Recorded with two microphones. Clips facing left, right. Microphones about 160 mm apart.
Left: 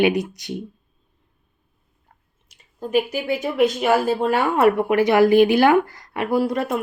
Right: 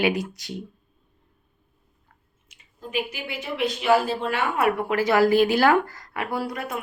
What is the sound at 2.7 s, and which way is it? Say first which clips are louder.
Speech: left 8 dB; 45° left (ahead or behind).